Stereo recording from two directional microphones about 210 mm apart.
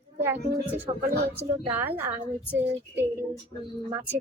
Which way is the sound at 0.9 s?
20° right (ahead or behind).